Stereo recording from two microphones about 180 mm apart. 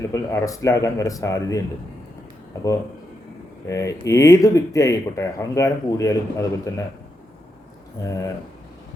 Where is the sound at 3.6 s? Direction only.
15° left (ahead or behind).